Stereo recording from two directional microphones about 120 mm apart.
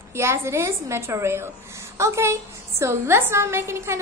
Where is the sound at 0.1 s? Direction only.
20° right (ahead or behind).